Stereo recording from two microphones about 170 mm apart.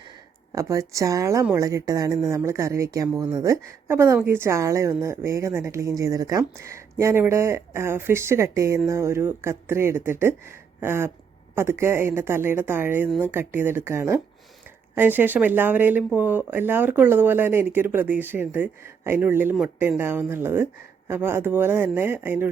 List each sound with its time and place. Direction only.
0.5 s a woman's voice: 20° right (ahead or behind)
10.8 s a sound: 15° right (ahead or behind)
11.5 s a woman's voice: 15° right (ahead or behind)